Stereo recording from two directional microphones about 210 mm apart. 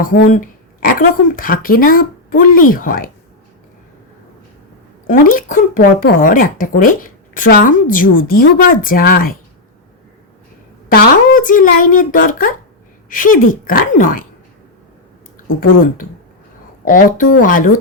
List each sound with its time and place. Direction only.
0.0 s speech: 40° left (ahead or behind)
5.0 s speech: 40° left (ahead or behind)
10.8 s speech: 40° left (ahead or behind)
16.8 s speech: 40° left (ahead or behind)